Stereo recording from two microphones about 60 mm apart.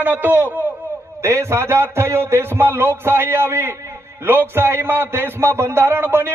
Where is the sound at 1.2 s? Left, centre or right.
Right.